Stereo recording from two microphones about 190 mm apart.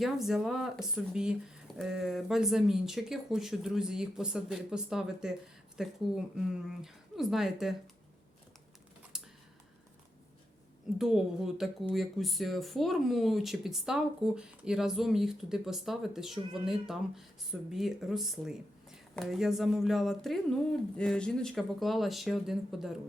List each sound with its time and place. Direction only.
0.0 s speech: centre (ahead or behind)
9.1 s computer keyboard: 5° right (ahead or behind)
10.9 s speech: centre (ahead or behind)